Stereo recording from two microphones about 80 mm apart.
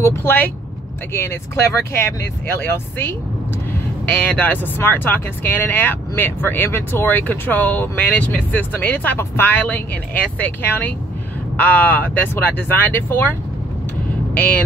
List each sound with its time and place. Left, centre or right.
0.0 s speech: left
4.4 s speech: left